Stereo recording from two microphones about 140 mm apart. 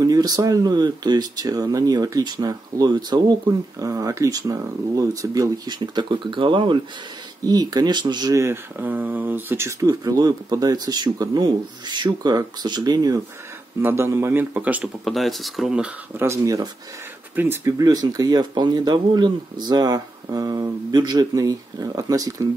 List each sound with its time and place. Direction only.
0.0 s speech: 25° right (ahead or behind)
13.7 s speech: 15° right (ahead or behind)
15.0 s speech: centre (ahead or behind)
16.3 s speech: 25° right (ahead or behind)